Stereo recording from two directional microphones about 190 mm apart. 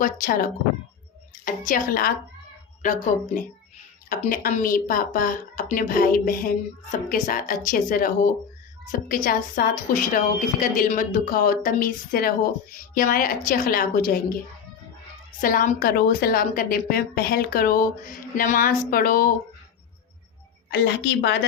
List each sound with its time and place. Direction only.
0.0 s a woman's voice: 45° left (ahead or behind)
15.4 s a woman's voice: 45° left (ahead or behind)
20.7 s a woman's voice: 65° left (ahead or behind)